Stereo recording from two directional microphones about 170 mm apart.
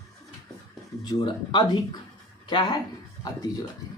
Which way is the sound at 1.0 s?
25° left (ahead or behind).